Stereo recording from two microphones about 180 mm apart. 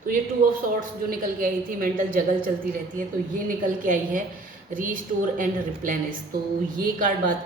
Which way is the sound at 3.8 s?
45° right (ahead or behind).